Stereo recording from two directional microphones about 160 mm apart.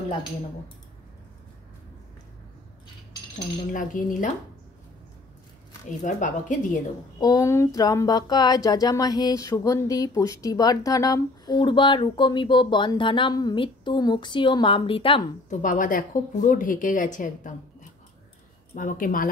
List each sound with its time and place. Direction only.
3.7 s a woman's voice: 55° left (ahead or behind)
5.9 s speech: 50° left (ahead or behind)
7.2 s speech: 25° left (ahead or behind)
15.5 s a woman's voice: 55° left (ahead or behind)
18.8 s a woman's voice: 55° left (ahead or behind)